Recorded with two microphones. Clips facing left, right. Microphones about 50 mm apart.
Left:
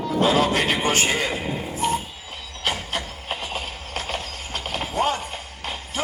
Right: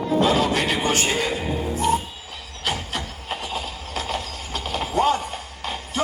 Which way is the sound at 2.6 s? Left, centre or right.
Left.